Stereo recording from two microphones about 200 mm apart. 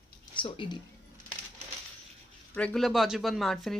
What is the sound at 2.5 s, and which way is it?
Speech, 5° left (ahead or behind).